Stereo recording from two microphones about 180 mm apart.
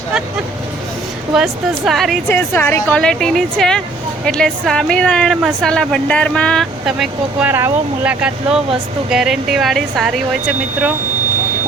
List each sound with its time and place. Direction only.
1.3 s speech: 5° right (ahead or behind)
2.3 s speech: 10° left (ahead or behind); by 10.9 s 5° right (ahead or behind)